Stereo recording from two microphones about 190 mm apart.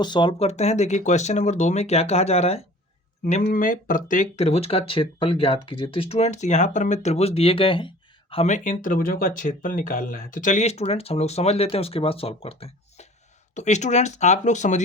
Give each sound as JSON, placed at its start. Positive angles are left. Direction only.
{"t": 0.0, "sound": "speech", "side_deg": 25}
{"t": 3.4, "sound": "speech", "side_deg": 45}